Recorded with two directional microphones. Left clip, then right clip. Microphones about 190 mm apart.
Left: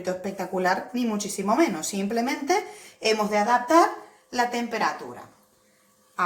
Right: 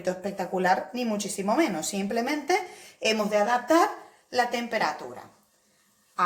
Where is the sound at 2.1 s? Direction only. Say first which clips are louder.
Left 2 dB; 35° right (ahead or behind).